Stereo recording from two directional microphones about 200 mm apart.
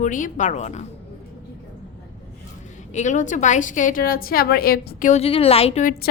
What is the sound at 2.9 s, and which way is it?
A woman's voice, 40° left (ahead or behind).